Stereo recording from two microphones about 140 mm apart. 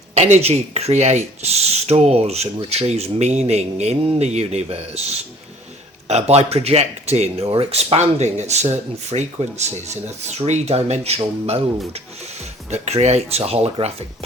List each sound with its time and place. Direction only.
0.1 s speech: 50° right (ahead or behind)
12.7 s speech: 55° right (ahead or behind)